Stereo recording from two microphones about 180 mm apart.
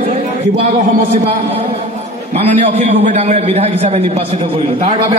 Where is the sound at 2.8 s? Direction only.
35° right (ahead or behind).